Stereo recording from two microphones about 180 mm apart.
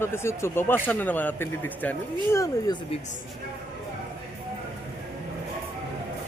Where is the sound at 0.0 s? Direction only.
15° left (ahead or behind).